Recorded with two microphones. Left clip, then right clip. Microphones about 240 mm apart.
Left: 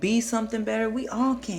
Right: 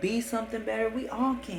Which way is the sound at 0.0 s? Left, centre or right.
Left.